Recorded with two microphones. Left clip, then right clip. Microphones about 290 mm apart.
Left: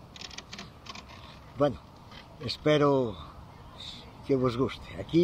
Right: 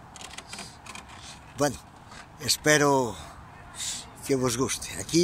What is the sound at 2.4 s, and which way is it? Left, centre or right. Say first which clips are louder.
Speech: right 3 dB; centre.